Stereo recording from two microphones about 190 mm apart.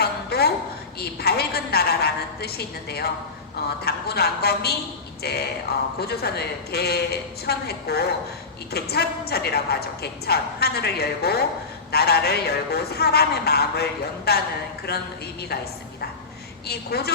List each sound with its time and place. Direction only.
0.0 s a sound: 55° left (ahead or behind)
0.9 s a woman's voice: 55° left (ahead or behind)
16.6 s a woman's voice: 55° left (ahead or behind)